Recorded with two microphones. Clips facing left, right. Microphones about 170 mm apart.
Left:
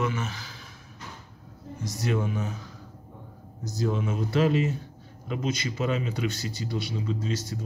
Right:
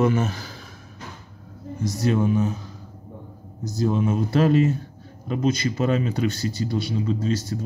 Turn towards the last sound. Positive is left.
turn(degrees=-30)  # may be behind; listen again after turning